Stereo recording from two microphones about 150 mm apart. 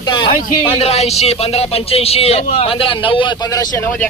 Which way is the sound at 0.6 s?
40° left (ahead or behind).